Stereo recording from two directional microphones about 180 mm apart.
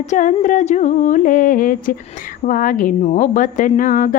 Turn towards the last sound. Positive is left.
turn(degrees=45)  # may be behind; listen again after turning